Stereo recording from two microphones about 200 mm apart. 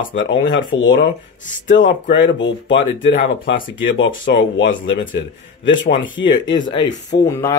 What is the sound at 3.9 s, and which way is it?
Speech, 70° left (ahead or behind).